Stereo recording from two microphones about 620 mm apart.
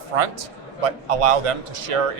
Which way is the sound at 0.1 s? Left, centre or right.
Right.